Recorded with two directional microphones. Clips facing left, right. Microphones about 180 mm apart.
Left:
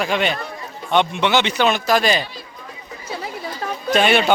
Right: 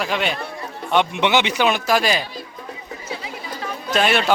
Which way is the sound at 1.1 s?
15° right (ahead or behind).